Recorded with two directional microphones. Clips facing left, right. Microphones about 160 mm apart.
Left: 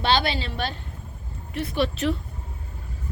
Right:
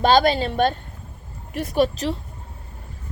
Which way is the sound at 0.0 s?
45° right (ahead or behind).